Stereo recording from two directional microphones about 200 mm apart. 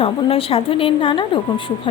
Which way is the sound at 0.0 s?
30° left (ahead or behind).